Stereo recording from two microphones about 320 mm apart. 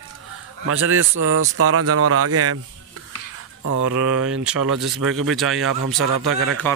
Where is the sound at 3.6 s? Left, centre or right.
Right.